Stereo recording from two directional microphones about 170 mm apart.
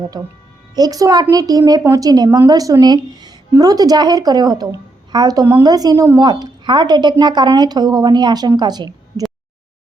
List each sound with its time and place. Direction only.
0.1 s a woman's voice: 20° right (ahead or behind)